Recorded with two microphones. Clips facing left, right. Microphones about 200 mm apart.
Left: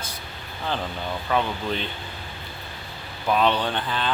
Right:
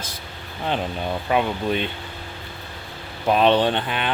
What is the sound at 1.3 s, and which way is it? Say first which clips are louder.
Speech: right 3 dB; 15° right (ahead or behind).